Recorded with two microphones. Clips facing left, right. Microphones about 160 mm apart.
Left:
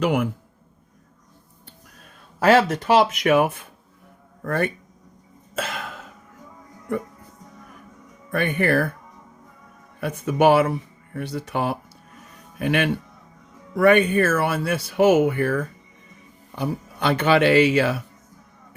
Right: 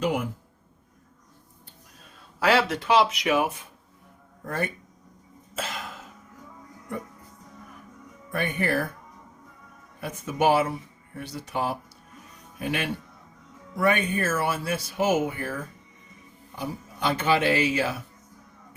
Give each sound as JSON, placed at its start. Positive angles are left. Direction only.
{"t": 0.0, "sound": "speech", "side_deg": 70}
{"t": 2.4, "sound": "speech", "side_deg": 45}
{"t": 5.5, "sound": "throat clearing", "side_deg": 65}
{"t": 8.3, "sound": "speech", "side_deg": 60}
{"t": 10.0, "sound": "speech", "side_deg": 65}